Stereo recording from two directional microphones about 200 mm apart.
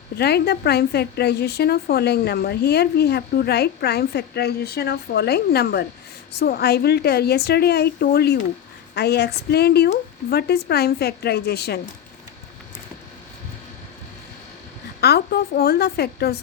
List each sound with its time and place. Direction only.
0.2 s a woman's voice: 55° left (ahead or behind)
15.0 s a woman's voice: 55° left (ahead or behind)